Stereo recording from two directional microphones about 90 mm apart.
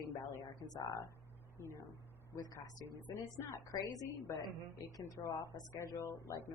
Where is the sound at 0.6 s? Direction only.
45° left (ahead or behind).